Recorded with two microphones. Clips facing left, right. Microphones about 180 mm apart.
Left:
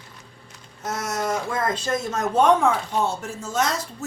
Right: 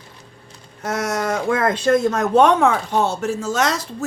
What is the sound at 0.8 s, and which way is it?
Speech, 65° right (ahead or behind).